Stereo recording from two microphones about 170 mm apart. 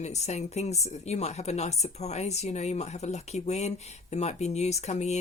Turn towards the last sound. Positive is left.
turn(degrees=40)  # may be behind; listen again after turning